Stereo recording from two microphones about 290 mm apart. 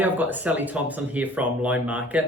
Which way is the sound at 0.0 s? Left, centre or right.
Centre.